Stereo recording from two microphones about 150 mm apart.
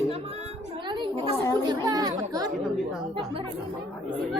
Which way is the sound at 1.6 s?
25° right (ahead or behind).